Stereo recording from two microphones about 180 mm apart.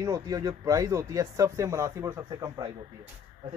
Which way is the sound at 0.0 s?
20° right (ahead or behind).